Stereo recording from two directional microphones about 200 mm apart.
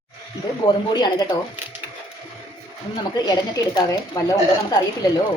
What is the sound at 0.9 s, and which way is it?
Speech, 20° left (ahead or behind).